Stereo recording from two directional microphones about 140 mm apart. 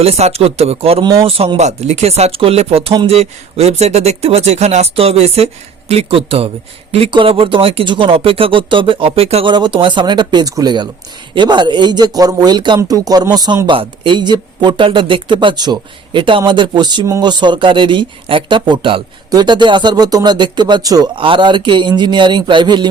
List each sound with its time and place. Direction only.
0.0 s a man's voice: 50° right (ahead or behind)